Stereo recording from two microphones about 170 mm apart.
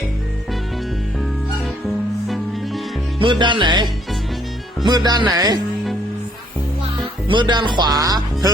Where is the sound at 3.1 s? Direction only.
30° right (ahead or behind).